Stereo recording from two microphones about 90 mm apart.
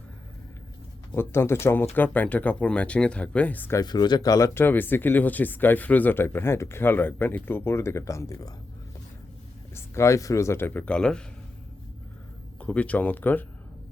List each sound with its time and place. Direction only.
1.1 s speech: 25° left (ahead or behind)
3.8 s speech: 50° left (ahead or behind)
9.7 s speech: 30° left (ahead or behind)
10.8 s speech: 10° left (ahead or behind)
12.5 s speech: 15° left (ahead or behind)